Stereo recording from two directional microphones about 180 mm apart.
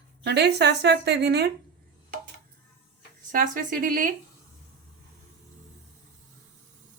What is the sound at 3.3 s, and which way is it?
Speech, 50° right (ahead or behind).